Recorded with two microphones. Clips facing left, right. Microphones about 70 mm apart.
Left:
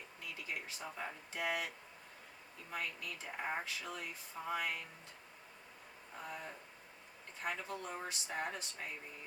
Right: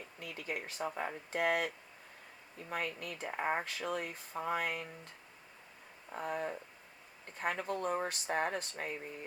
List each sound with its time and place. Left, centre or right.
0.2 s speech: right
6.1 s speech: right